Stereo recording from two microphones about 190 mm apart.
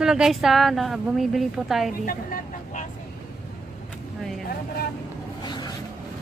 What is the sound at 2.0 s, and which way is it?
Vehicle, 50° left (ahead or behind).